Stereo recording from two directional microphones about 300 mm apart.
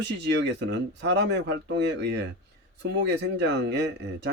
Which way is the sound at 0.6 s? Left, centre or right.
Right.